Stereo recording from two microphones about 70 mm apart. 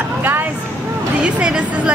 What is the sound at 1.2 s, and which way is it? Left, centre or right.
Speech, centre.